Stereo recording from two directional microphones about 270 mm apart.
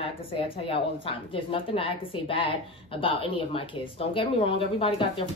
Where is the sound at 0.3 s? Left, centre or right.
Left.